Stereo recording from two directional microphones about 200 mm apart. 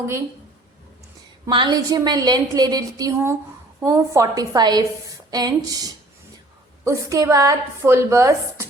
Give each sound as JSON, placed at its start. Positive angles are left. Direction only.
{"t": 1.5, "sound": "a woman's voice", "side_deg": -25}